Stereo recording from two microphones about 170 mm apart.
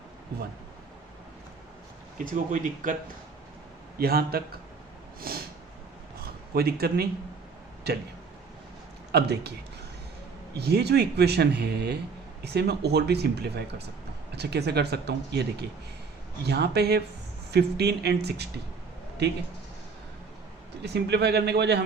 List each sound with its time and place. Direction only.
2.3 s speech: 50° right (ahead or behind)
3.9 s a man's voice: 65° right (ahead or behind)
5.3 s snort: 60° right (ahead or behind)
6.2 s a man's voice: 60° right (ahead or behind)
9.1 s speech: 75° right (ahead or behind)
10.6 s speech: 70° right (ahead or behind)
20.8 s speech: 80° right